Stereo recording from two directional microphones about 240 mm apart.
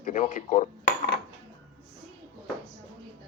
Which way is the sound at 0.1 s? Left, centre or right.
Left.